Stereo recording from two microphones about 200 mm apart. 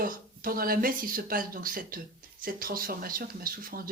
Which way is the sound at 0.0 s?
45° right (ahead or behind).